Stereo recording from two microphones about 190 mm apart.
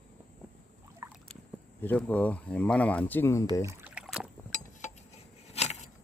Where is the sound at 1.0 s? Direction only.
15° right (ahead or behind).